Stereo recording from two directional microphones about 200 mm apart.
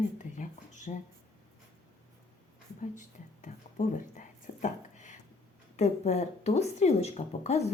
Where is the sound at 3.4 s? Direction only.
40° left (ahead or behind).